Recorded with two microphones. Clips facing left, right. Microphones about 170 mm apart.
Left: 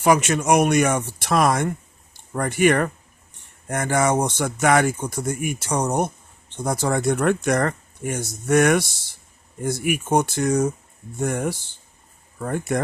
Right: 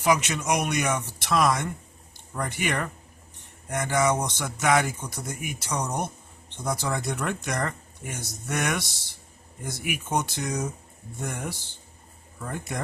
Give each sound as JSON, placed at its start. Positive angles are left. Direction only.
{"t": 0.0, "sound": "speech", "side_deg": 50}